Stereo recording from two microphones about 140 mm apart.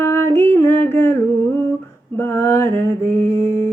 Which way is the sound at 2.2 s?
15° left (ahead or behind).